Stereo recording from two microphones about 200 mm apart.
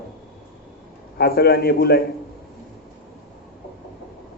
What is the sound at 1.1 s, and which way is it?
Speech, 50° left (ahead or behind).